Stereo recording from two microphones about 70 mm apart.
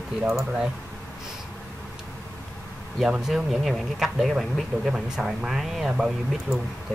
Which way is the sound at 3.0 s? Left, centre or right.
Centre.